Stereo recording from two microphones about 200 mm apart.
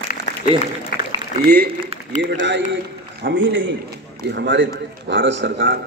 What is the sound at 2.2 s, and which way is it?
A man's voice, 60° right (ahead or behind).